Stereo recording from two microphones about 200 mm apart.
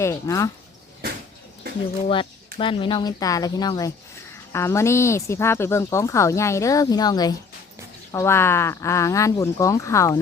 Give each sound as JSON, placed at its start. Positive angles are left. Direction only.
{"t": 0.0, "sound": "speech", "side_deg": 15}
{"t": 2.6, "sound": "speech", "side_deg": 25}